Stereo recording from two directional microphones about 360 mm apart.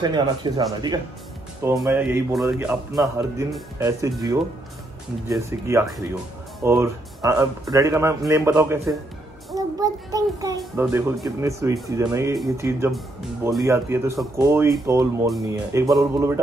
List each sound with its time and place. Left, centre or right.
0.0 s speech: centre
9.6 s child singing: centre
10.6 s speech: centre